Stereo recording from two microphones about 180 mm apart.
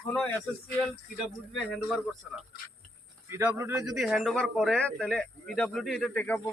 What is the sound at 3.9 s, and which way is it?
Speech, centre (ahead or behind).